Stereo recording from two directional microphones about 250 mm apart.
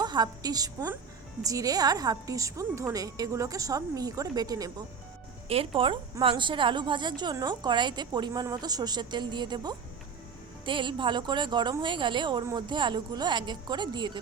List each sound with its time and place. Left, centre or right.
0.0 s a woman's voice: centre